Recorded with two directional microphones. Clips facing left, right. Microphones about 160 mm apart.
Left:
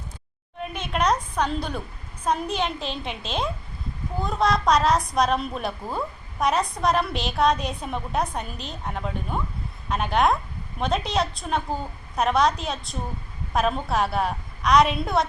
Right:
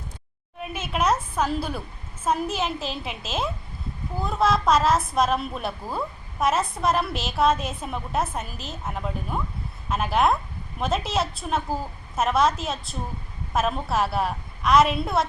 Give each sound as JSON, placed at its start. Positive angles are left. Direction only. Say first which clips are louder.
{"t": 0.6, "sound": "a woman's voice", "louder": "even", "side_deg": -5}